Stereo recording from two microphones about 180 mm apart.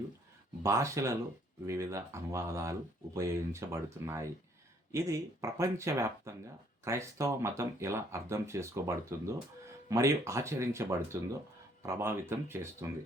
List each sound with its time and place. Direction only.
0.6 s speech: 15° right (ahead or behind)